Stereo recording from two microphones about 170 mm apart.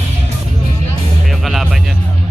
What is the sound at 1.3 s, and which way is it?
Music, centre (ahead or behind).